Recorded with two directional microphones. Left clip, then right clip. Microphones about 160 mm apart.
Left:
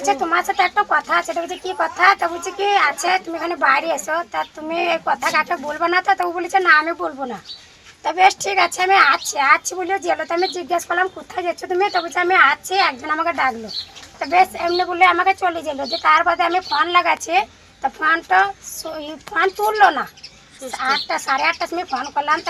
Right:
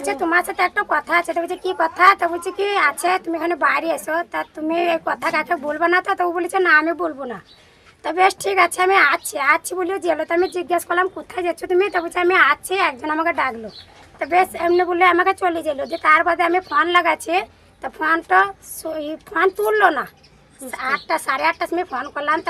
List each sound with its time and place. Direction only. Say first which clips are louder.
0.9 s speech: left 1 dB; 25° right (ahead or behind)
8.0 s speech: left 2 dB; 30° right (ahead or behind)